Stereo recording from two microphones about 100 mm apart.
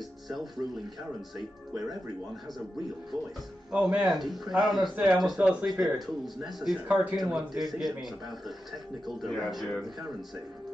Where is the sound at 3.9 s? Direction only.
Centre (ahead or behind).